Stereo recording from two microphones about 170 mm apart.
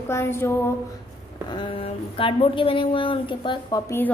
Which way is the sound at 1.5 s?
30° left (ahead or behind).